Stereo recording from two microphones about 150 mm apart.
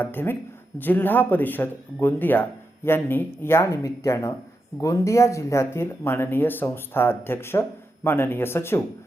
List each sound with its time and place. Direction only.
0.0 s speech: 15° left (ahead or behind)